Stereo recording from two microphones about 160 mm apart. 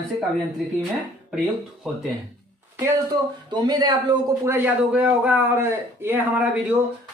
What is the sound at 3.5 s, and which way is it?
A man's voice, 25° right (ahead or behind).